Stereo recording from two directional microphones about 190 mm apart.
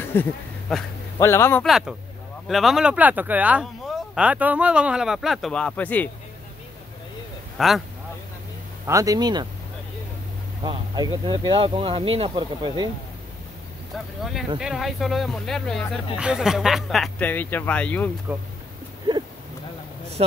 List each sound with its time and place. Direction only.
0.0 s a man's voice: 10° left (ahead or behind)
1.6 s speech: centre (ahead or behind)
7.5 s speech: centre (ahead or behind)
8.8 s speech: 15° right (ahead or behind)
10.6 s speech: 20° right (ahead or behind)
13.9 s speech: centre (ahead or behind)
20.2 s speech: 30° right (ahead or behind)